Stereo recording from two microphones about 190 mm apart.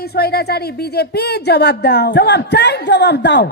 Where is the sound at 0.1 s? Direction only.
55° left (ahead or behind).